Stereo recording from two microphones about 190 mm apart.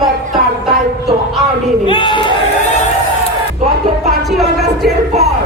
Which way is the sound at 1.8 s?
25° left (ahead or behind).